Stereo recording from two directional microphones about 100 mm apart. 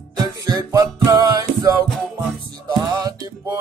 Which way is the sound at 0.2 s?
40° right (ahead or behind).